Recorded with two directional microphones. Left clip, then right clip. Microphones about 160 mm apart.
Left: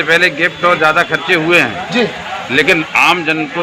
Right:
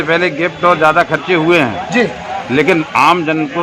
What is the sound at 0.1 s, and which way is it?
A man's voice, 90° right.